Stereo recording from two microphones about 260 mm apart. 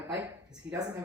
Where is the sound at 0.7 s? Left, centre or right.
Right.